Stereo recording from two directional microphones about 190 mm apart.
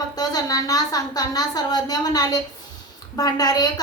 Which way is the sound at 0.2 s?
20° left (ahead or behind).